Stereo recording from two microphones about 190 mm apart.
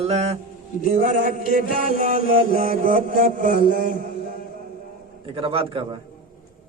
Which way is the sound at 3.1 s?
50° left (ahead or behind).